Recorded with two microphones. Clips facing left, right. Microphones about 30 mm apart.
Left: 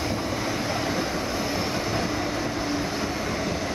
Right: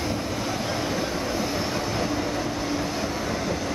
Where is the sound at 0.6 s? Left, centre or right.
Centre.